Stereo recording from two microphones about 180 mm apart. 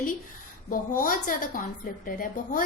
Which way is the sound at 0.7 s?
50° left (ahead or behind).